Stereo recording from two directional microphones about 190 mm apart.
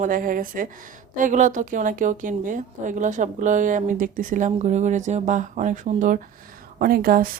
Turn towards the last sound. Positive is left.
turn(degrees=-50)  # may be behind; listen again after turning